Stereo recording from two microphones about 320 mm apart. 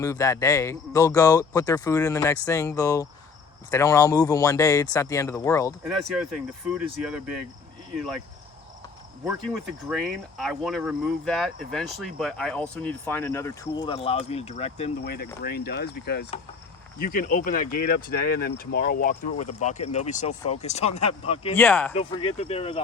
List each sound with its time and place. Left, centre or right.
0.0 s speech: centre
6.1 s speech: centre
9.2 s speech: centre; by 19.3 s left
19.4 s speech: left
19.6 s speech: left
21.5 s speech: centre
21.9 s speech: centre